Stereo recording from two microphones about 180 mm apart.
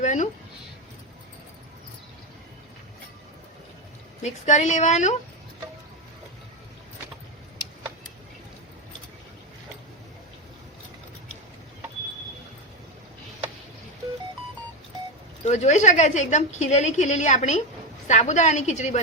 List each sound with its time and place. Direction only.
0.0 s speech: 45° left (ahead or behind)
4.2 s a woman's voice: 40° left (ahead or behind)
15.4 s a woman's voice: 40° left (ahead or behind)